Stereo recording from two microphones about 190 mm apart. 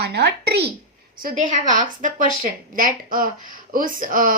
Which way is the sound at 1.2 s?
40° right (ahead or behind).